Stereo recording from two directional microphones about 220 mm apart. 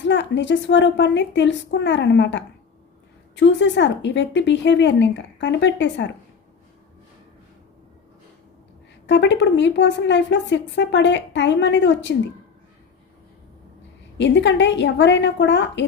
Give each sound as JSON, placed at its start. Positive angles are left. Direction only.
{"t": 0.0, "sound": "a woman's voice", "side_deg": 55}
{"t": 9.0, "sound": "a woman's voice", "side_deg": 55}
{"t": 14.2, "sound": "a woman's voice", "side_deg": 55}